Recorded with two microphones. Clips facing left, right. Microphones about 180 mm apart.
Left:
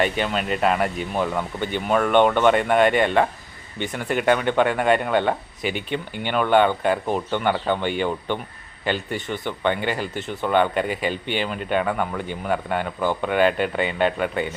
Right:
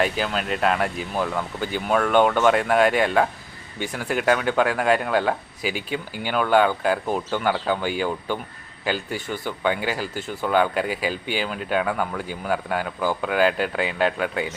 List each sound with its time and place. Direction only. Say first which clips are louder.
0.0 s speech: left 1 dB; centre (ahead or behind)